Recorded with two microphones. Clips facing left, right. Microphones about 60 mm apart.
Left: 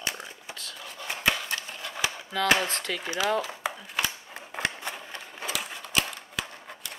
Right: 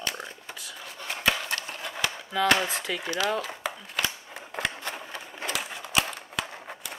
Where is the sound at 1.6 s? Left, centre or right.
Centre.